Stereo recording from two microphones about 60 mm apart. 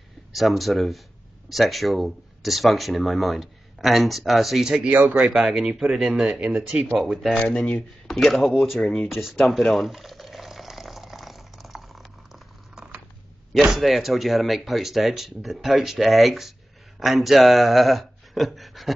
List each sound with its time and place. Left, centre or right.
0.3 s speech: centre
4.6 s speech: centre
5.3 s speech: centre
5.7 s speech: centre
7.0 s speech: centre
7.3 s speech: centre
8.1 s speech: centre
9.6 s speech: centre
9.8 s boiling: centre
12.7 s a sound: centre
13.7 s speech: centre